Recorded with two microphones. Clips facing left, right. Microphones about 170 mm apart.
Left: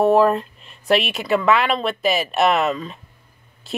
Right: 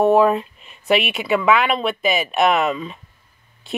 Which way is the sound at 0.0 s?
Centre (ahead or behind).